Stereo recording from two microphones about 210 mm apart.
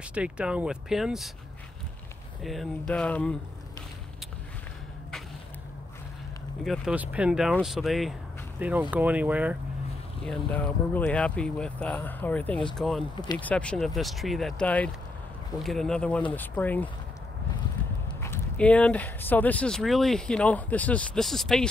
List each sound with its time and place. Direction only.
0.1 s speech: 5° right (ahead or behind)
2.4 s speech: centre (ahead or behind)
6.6 s speech: centre (ahead or behind)
10.2 s speech: 5° left (ahead or behind)
13.1 s speech: 20° left (ahead or behind)
13.4 s speech: 5° left (ahead or behind)
18.2 s speech: 10° left (ahead or behind)